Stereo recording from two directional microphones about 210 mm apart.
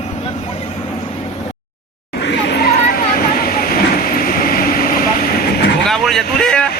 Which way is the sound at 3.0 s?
45° left (ahead or behind).